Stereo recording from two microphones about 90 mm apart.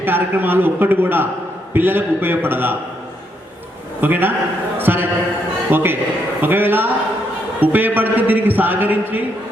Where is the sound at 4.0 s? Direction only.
20° right (ahead or behind).